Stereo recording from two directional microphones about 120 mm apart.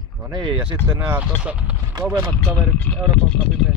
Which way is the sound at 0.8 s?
20° right (ahead or behind).